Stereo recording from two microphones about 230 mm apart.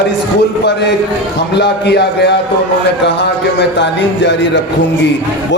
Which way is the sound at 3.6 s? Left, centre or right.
Left.